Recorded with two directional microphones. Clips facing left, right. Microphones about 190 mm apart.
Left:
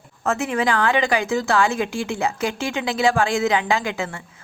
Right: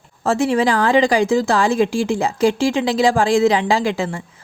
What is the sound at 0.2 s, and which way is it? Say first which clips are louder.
Speech: right 6 dB; 30° right (ahead or behind).